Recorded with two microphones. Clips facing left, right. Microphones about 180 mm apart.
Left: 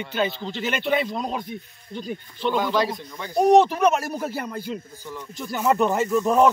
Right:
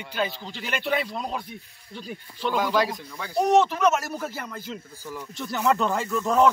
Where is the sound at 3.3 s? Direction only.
15° left (ahead or behind).